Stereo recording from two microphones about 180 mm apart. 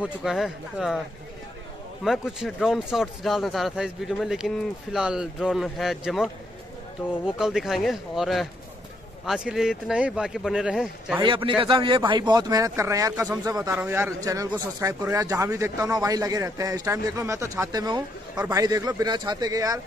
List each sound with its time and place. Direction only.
0.0 s speech: centre (ahead or behind)
2.0 s speech: centre (ahead or behind)
7.3 s speech: centre (ahead or behind)
11.1 s a man's voice: 25° right (ahead or behind)